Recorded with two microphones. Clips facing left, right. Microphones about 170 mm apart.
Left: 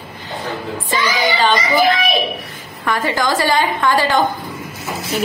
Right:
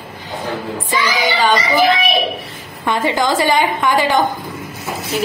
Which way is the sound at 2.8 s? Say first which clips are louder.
Right 2 dB; 20° right (ahead or behind).